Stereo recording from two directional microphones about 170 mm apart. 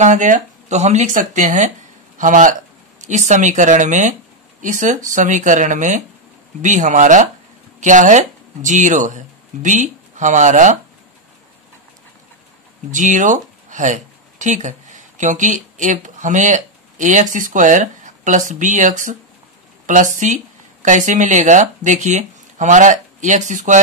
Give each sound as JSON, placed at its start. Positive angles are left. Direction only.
{"t": 0.0, "sound": "speech", "side_deg": -45}
{"t": 12.9, "sound": "speech", "side_deg": -45}